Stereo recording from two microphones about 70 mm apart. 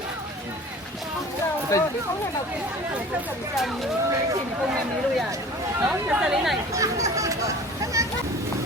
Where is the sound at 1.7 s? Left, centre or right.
Left.